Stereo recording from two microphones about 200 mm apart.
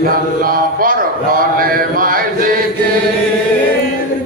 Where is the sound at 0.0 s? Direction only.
45° right (ahead or behind).